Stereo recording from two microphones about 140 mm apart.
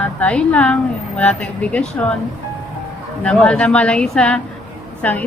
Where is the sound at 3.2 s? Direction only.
5° left (ahead or behind).